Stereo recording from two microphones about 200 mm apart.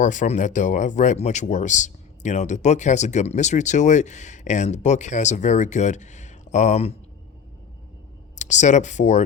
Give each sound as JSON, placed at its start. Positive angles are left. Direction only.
{"t": 0.0, "sound": "speech", "side_deg": 40}
{"t": 8.4, "sound": "speech", "side_deg": 35}